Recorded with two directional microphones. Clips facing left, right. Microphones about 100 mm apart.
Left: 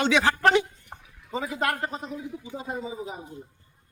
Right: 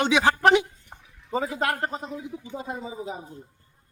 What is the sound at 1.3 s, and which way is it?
Speech, 35° right (ahead or behind).